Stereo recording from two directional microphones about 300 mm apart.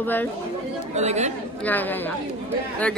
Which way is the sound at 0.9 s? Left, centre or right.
Right.